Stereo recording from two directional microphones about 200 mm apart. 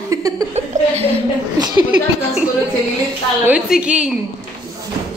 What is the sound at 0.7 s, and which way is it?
Speech, 40° right (ahead or behind).